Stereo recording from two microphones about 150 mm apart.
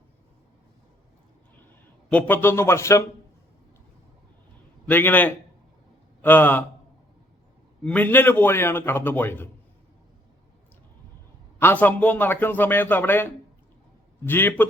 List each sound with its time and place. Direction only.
2.0 s a man's voice: 10° left (ahead or behind)
4.9 s a man's voice: 10° left (ahead or behind)
7.9 s a man's voice: 10° left (ahead or behind)
11.6 s a man's voice: 10° left (ahead or behind)
14.3 s a man's voice: 15° left (ahead or behind)